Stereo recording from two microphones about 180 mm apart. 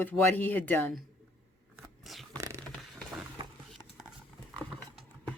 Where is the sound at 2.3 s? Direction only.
15° right (ahead or behind).